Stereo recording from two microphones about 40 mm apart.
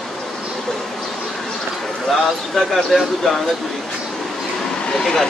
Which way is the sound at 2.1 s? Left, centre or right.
Centre.